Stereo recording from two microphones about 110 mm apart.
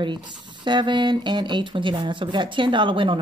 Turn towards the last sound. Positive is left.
turn(degrees=-50)  # may be behind; listen again after turning